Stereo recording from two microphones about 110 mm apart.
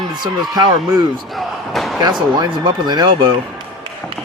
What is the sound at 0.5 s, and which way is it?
Speech, 40° right (ahead or behind).